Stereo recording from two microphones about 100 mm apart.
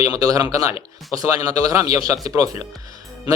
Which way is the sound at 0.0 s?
40° right (ahead or behind).